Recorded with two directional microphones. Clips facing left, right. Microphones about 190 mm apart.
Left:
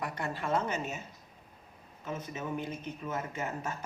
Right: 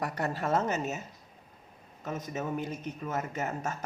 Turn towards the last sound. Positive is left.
turn(degrees=-45)  # may be behind; listen again after turning